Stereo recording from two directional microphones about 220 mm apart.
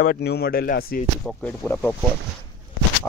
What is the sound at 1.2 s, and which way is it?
Speech, 5° left (ahead or behind).